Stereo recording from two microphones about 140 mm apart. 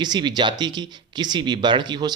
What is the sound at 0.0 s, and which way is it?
A man's voice, 30° right (ahead or behind).